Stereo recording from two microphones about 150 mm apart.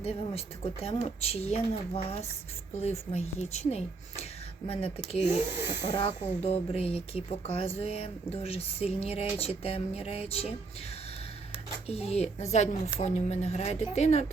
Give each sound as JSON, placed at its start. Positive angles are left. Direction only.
{"t": 0.0, "sound": "speech", "side_deg": 40}
{"t": 11.9, "sound": "speech", "side_deg": 45}